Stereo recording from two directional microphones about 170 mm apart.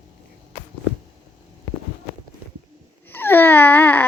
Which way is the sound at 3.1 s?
10° left (ahead or behind).